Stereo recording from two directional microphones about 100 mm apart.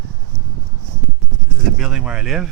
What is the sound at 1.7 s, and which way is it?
Speech, 5° right (ahead or behind).